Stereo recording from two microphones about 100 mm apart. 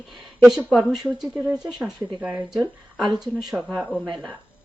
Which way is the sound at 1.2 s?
5° right (ahead or behind).